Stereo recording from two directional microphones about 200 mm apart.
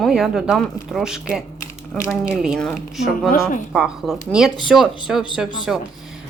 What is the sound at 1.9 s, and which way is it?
Speech, 15° left (ahead or behind).